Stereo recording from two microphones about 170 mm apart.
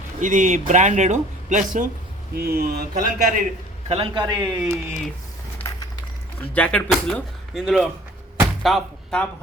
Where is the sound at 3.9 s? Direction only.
35° right (ahead or behind).